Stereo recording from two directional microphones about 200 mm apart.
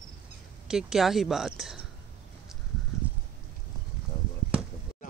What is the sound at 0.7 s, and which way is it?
Speech, centre (ahead or behind).